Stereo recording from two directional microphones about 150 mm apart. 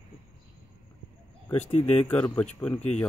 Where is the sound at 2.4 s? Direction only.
10° left (ahead or behind).